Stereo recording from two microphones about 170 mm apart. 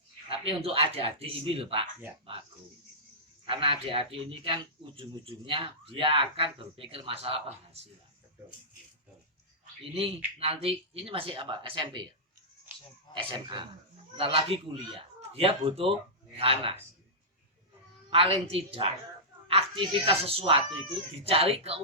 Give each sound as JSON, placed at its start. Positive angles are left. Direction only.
{"t": 0.3, "sound": "speech", "side_deg": -35}
{"t": 3.5, "sound": "speech", "side_deg": -30}
{"t": 9.8, "sound": "speech", "side_deg": -35}
{"t": 13.1, "sound": "speech", "side_deg": -30}
{"t": 18.1, "sound": "a woman's voice", "side_deg": -35}